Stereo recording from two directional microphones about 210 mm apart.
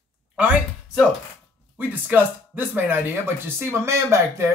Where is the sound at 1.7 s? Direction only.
10° right (ahead or behind).